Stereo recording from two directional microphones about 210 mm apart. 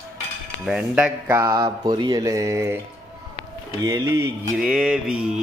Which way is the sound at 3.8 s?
15° right (ahead or behind).